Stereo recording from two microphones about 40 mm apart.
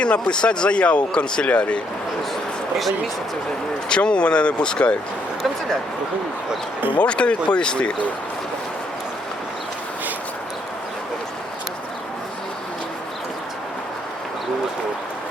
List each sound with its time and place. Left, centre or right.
0.0 s speech: left
3.8 s speech: left
6.9 s speech: left